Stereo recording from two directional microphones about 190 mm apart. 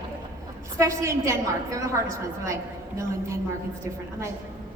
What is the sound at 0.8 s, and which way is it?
Speech, 15° right (ahead or behind).